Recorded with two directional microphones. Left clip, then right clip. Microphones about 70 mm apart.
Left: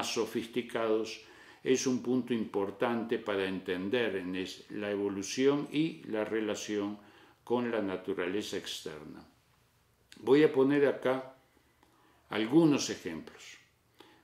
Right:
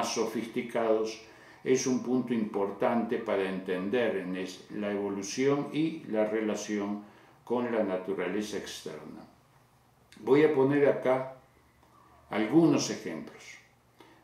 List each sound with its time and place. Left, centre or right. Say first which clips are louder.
0.4 s speech: right 2 dB; left
10.0 s speech: right 2 dB; left
12.3 s speech: right 2 dB; left